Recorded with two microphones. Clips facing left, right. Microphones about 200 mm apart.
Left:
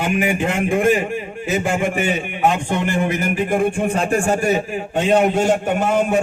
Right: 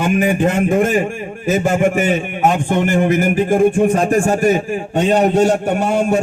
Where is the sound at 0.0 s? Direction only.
45° right (ahead or behind).